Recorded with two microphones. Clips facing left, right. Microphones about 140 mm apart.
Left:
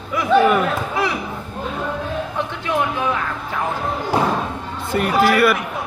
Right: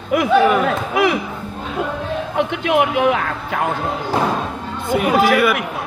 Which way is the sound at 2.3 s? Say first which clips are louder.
Right 7 dB; 75° right (ahead or behind).